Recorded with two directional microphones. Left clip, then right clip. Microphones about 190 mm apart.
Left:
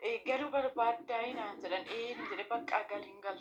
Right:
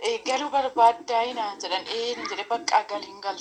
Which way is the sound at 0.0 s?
25° right (ahead or behind).